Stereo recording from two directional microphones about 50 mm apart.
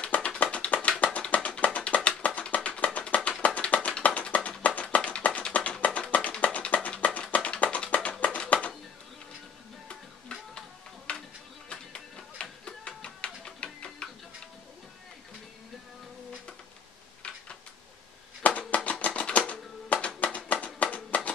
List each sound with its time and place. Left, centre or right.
0.0 s music: left
3.3 s tap: left
6.4 s music: left
11.1 s music: left
18.4 s a sound: left
18.9 s typewriter: left
20.6 s a sound: left